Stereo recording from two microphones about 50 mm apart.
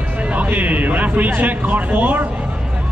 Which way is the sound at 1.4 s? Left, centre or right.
Right.